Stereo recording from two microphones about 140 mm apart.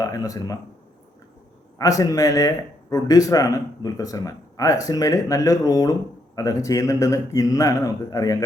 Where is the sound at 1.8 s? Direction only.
25° left (ahead or behind).